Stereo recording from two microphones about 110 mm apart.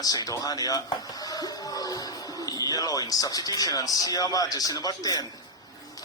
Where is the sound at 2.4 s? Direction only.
35° left (ahead or behind).